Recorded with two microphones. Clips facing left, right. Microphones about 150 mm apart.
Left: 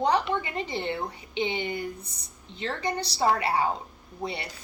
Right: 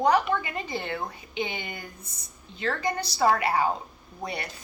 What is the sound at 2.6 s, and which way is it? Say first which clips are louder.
A woman's voice: right 2 dB; 25° left (ahead or behind).